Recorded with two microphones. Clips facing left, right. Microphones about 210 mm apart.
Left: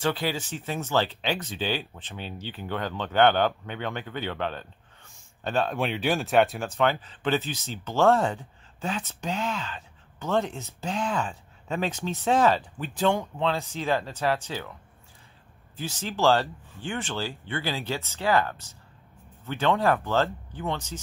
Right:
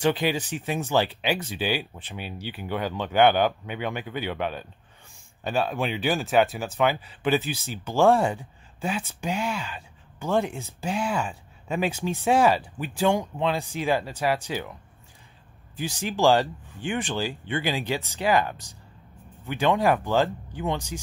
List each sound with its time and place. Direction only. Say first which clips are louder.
0.0 s speech: right 4 dB; 15° right (ahead or behind)